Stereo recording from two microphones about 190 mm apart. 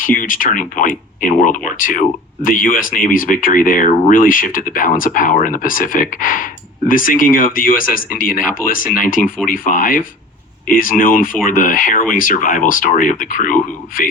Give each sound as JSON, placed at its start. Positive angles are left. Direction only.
{"t": 0.0, "sound": "speech", "side_deg": 45}